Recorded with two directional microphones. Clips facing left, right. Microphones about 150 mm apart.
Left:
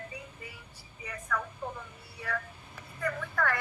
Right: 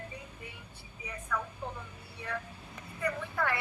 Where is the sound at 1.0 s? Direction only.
10° right (ahead or behind).